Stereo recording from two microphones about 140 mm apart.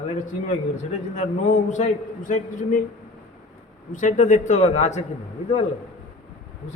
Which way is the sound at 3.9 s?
65° left (ahead or behind).